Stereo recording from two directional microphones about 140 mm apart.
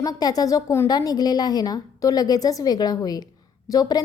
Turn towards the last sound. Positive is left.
turn(degrees=25)  # may be behind; listen again after turning